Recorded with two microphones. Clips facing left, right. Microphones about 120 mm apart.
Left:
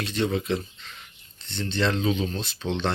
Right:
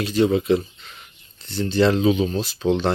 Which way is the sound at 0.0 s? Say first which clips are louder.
Right 7 dB; 5° right (ahead or behind).